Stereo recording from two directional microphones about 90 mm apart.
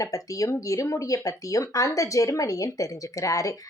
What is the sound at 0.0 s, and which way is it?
Speech, 40° left (ahead or behind).